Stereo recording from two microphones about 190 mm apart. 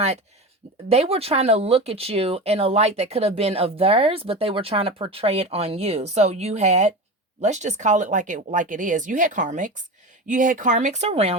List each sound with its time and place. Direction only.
0.9 s speech: 30° right (ahead or behind)